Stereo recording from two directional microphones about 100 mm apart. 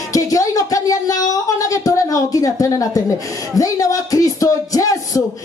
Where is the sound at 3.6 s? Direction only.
35° left (ahead or behind).